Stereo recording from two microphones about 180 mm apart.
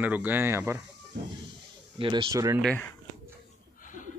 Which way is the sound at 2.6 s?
10° left (ahead or behind).